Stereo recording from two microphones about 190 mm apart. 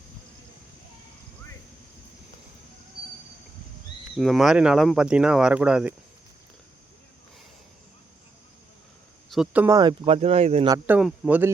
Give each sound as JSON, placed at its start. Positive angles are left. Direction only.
{"t": 4.2, "sound": "speech", "side_deg": 0}
{"t": 9.3, "sound": "speech", "side_deg": -5}
{"t": 9.7, "sound": "speech", "side_deg": -20}
{"t": 10.2, "sound": "speech", "side_deg": -35}
{"t": 10.8, "sound": "speech", "side_deg": -10}